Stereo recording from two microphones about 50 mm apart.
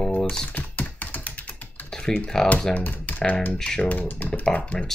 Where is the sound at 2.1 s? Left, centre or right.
Centre.